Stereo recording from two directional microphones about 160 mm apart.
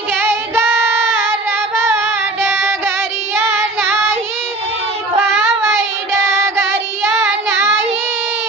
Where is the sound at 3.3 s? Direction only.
15° right (ahead or behind).